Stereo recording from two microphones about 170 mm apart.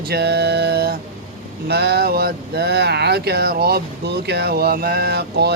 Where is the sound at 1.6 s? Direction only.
75° right (ahead or behind).